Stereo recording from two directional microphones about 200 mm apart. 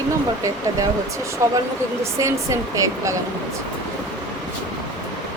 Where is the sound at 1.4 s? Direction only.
15° right (ahead or behind).